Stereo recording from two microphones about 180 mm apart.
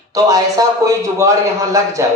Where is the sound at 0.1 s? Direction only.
20° right (ahead or behind).